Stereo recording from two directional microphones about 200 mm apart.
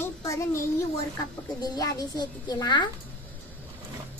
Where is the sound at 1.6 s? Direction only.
20° left (ahead or behind).